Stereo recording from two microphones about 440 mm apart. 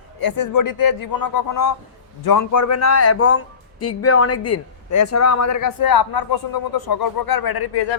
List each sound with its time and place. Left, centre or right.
0.2 s a man's voice: left